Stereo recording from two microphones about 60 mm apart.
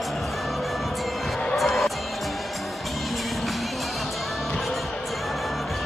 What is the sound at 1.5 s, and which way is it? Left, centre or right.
Music, centre.